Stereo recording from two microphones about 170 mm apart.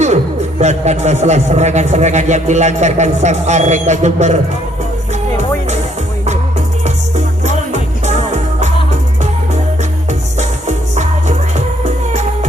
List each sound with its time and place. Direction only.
0.6 s a man's voice: 40° right (ahead or behind)
5.4 s music: 40° right (ahead or behind)
7.4 s music: 45° right (ahead or behind)
10.7 s music: 45° right (ahead or behind)